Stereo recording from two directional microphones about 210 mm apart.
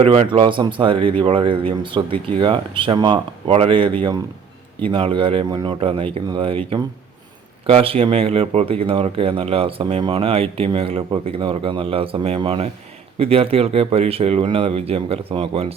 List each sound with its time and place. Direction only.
0.0 s speech: 25° right (ahead or behind)
7.7 s speech: 25° right (ahead or behind)